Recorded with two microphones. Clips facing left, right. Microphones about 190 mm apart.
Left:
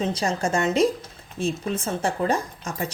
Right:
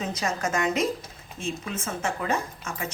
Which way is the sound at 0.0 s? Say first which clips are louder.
Left 4 dB; 30° left (ahead or behind).